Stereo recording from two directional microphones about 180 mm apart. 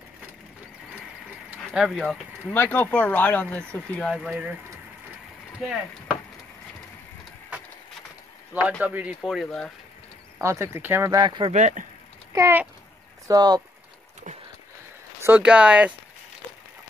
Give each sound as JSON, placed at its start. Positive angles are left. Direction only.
{"t": 1.7, "sound": "speech", "side_deg": 0}
{"t": 8.5, "sound": "speech", "side_deg": -5}
{"t": 10.4, "sound": "speech", "side_deg": -15}
{"t": 11.1, "sound": "speech", "side_deg": -25}
{"t": 11.5, "sound": "speech", "side_deg": -45}
{"t": 12.3, "sound": "speech", "side_deg": -15}
{"t": 15.2, "sound": "speech", "side_deg": -10}